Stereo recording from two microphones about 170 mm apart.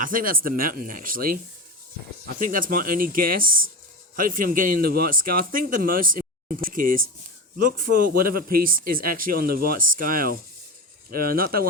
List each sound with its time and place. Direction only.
0.0 s speech: 55° right (ahead or behind)
2.4 s speech: 55° right (ahead or behind)